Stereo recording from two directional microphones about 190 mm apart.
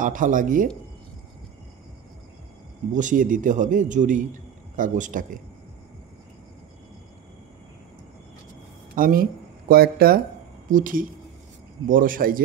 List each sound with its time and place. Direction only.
0.0 s a man's voice: 45° right (ahead or behind)
2.9 s a man's voice: 40° right (ahead or behind)
8.9 s a man's voice: 50° right (ahead or behind)